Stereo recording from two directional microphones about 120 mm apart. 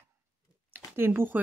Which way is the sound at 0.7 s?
20° right (ahead or behind).